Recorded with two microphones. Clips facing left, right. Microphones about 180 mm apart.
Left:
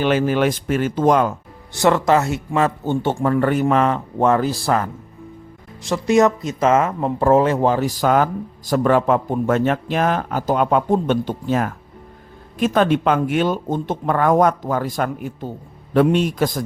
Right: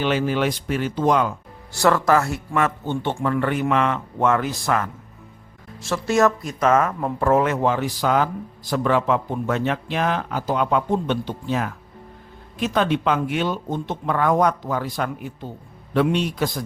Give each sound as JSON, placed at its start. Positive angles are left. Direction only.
{"t": 0.0, "sound": "speech", "side_deg": 50}
{"t": 1.7, "sound": "speech", "side_deg": 20}
{"t": 5.8, "sound": "speech", "side_deg": 15}